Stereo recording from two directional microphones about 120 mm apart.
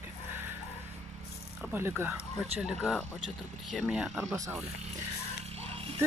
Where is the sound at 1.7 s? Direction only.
20° right (ahead or behind).